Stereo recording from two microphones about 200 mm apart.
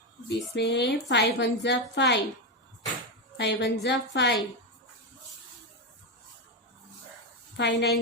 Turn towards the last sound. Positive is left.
turn(degrees=60)  # may be behind; listen again after turning